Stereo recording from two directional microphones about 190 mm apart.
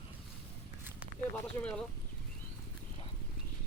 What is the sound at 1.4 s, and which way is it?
Speech, 5° left (ahead or behind).